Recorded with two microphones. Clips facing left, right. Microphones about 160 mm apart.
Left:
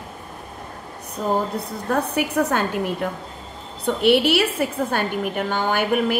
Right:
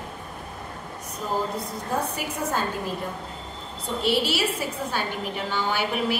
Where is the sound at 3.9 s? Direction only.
65° left (ahead or behind).